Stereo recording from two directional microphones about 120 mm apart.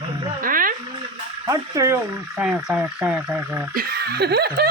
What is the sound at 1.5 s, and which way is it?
Frog, 25° right (ahead or behind).